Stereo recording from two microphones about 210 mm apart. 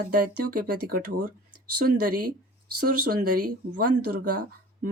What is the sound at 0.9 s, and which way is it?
Speech, 45° right (ahead or behind).